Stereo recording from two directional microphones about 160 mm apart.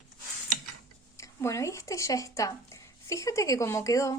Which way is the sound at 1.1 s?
20° left (ahead or behind).